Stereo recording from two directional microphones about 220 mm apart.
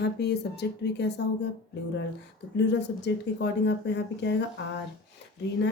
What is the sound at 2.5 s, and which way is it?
Speech, 50° left (ahead or behind).